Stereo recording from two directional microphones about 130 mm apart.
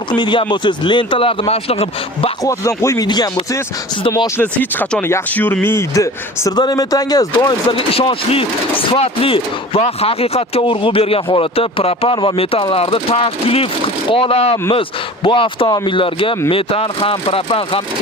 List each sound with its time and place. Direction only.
0.2 s speech: 40° left (ahead or behind)
2.4 s a man's voice: 25° left (ahead or behind)
4.4 s a man's voice: 15° left (ahead or behind); by 7.8 s 30° left (ahead or behind)
7.8 s speech: 45° left (ahead or behind)